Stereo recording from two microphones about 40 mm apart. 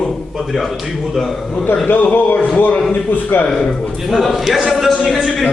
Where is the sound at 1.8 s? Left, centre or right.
Left.